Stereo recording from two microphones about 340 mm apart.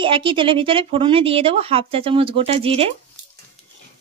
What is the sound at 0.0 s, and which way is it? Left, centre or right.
A woman's voice, centre.